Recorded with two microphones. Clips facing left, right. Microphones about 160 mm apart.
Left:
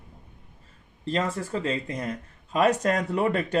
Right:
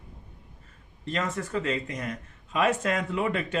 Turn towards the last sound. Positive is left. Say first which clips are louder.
# left 4 dB
turn(degrees=40)  # may be behind; listen again after turning